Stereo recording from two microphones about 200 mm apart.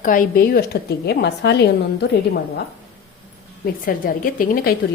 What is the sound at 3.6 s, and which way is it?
A woman's voice, 45° left (ahead or behind).